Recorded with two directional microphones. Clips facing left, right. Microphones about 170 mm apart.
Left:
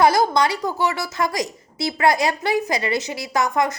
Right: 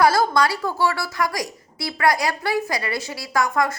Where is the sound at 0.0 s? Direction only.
20° left (ahead or behind).